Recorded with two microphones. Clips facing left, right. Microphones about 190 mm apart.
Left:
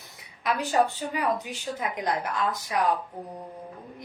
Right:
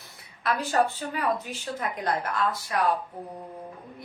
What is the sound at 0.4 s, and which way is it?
A woman's voice, 15° left (ahead or behind).